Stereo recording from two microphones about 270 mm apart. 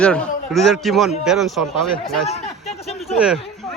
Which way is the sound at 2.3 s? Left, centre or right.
Left.